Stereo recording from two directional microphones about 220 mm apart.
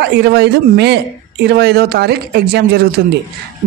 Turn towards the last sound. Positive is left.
turn(degrees=-45)  # may be behind; listen again after turning